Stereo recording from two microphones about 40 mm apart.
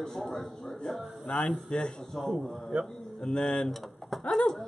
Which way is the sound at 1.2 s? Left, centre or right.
Left.